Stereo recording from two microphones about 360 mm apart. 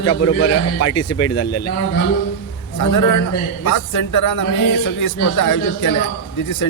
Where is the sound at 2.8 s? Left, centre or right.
Left.